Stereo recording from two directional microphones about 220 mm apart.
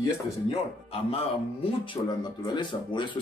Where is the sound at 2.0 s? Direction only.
20° left (ahead or behind).